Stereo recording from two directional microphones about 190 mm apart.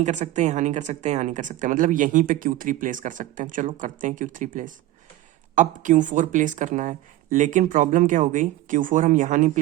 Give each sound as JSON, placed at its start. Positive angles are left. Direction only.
{"t": 0.0, "sound": "speech", "side_deg": -40}